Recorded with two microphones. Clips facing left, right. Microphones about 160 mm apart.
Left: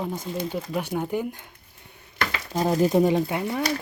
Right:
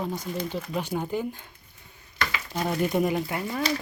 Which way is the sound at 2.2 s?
50° left (ahead or behind).